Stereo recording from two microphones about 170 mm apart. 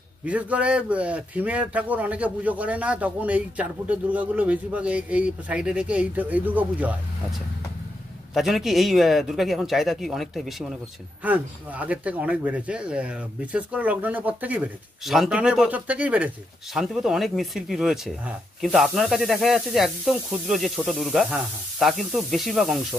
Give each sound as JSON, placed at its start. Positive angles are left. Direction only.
{"t": 0.2, "sound": "a man's voice", "side_deg": -10}
{"t": 8.4, "sound": "a man's voice", "side_deg": 0}